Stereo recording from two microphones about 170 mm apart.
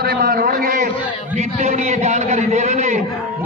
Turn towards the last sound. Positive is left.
turn(degrees=-40)  # may be behind; listen again after turning